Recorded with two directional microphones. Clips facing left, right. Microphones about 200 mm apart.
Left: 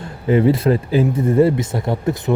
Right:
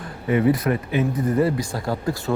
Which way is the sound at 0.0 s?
30° left (ahead or behind).